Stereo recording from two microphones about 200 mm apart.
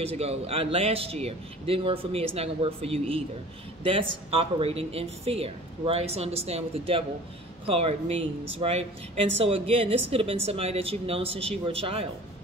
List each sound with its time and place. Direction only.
0.0 s speech: 30° right (ahead or behind)